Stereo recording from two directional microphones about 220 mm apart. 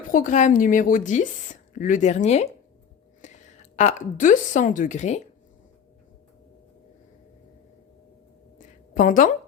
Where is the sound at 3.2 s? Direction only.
35° left (ahead or behind).